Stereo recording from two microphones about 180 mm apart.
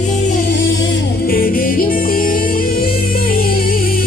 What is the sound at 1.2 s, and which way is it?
Music, 55° left (ahead or behind).